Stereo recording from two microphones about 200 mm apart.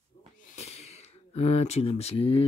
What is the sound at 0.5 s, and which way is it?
Speech, 35° left (ahead or behind).